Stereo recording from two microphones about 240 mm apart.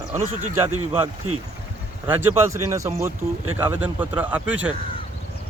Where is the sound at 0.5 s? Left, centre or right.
Centre.